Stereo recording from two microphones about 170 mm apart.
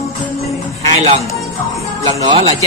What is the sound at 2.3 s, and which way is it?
Speech, 35° right (ahead or behind).